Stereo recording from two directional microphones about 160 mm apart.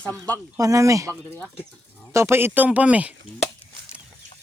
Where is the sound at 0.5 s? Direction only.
20° right (ahead or behind).